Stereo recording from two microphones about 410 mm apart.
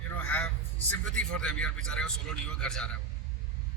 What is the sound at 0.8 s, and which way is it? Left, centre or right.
A man's voice, centre.